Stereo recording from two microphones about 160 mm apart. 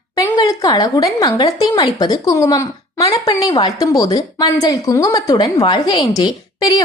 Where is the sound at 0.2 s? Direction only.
20° left (ahead or behind).